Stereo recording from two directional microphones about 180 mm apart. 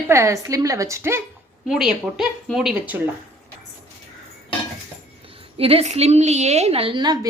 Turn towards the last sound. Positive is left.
turn(degrees=-25)  # may be behind; listen again after turning